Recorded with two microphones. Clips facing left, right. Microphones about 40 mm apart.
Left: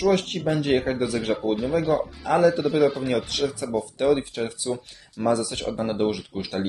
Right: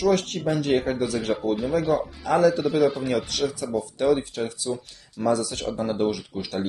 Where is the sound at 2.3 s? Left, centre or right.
Left.